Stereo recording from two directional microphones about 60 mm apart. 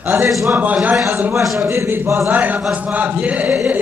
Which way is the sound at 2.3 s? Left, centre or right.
Right.